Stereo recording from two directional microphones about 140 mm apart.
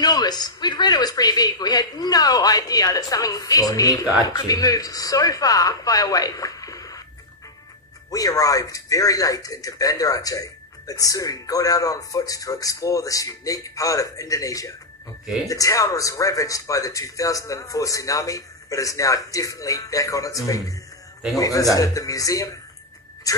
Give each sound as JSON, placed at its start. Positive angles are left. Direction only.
{"t": 0.0, "sound": "speech", "side_deg": 30}
{"t": 8.1, "sound": "speech", "side_deg": 25}